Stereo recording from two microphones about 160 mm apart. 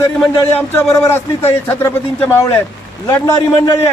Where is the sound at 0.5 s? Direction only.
15° left (ahead or behind).